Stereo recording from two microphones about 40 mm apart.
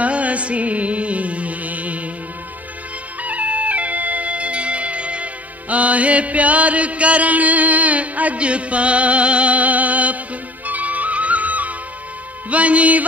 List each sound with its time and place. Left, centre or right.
0.0 s music: right
3.2 s music: right